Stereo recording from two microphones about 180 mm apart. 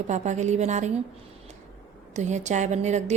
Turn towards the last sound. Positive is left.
turn(degrees=-40)  # may be behind; listen again after turning